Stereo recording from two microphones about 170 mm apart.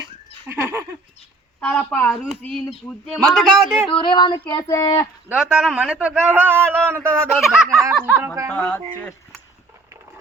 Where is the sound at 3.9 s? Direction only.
30° left (ahead or behind).